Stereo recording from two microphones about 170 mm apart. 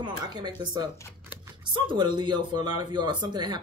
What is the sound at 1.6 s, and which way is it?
Speech, 30° right (ahead or behind).